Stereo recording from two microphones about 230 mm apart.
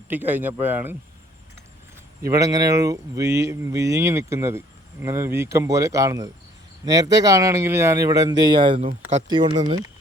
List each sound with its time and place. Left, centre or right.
0.1 s speech: centre
2.2 s speech: centre